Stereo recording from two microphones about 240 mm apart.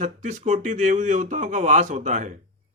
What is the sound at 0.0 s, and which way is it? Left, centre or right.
Speech, right.